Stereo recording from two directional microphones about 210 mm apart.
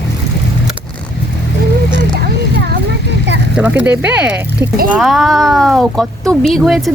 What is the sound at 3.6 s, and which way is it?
Speech, 10° right (ahead or behind).